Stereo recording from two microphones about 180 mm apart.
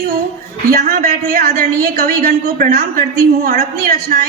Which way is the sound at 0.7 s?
55° right (ahead or behind).